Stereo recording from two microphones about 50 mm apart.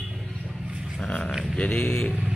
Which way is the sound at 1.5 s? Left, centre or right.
Left.